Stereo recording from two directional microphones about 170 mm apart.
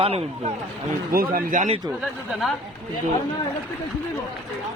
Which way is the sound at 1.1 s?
60° right (ahead or behind).